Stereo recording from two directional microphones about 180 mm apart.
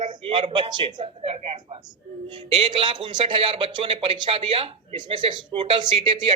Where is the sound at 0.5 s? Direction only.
25° right (ahead or behind).